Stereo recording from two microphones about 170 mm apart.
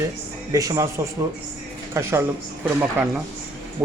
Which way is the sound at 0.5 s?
20° right (ahead or behind).